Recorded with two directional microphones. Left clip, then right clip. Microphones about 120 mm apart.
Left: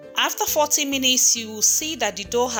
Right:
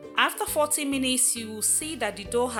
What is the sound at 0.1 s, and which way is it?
Speech, 20° left (ahead or behind).